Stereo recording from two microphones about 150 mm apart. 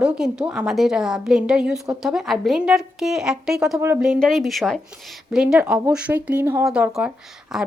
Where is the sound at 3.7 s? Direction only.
15° right (ahead or behind).